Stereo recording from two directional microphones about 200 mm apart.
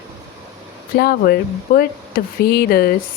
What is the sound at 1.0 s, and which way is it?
Speech, 50° left (ahead or behind).